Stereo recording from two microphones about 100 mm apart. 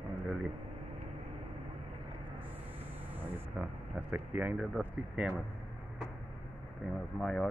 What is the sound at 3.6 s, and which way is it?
Speech, 10° right (ahead or behind).